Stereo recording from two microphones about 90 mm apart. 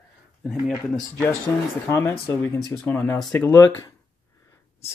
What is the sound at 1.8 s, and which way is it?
Speech, 30° left (ahead or behind).